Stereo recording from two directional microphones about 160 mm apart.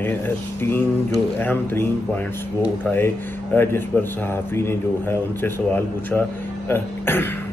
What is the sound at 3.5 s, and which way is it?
Speech, 15° left (ahead or behind).